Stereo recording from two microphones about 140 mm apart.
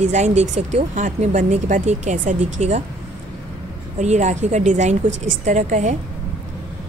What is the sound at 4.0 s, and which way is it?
A woman's voice, 55° right (ahead or behind).